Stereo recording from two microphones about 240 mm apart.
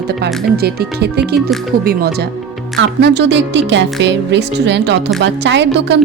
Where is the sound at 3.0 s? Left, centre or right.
Right.